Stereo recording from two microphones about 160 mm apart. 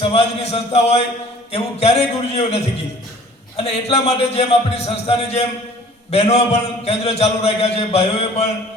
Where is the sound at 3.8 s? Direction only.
40° left (ahead or behind).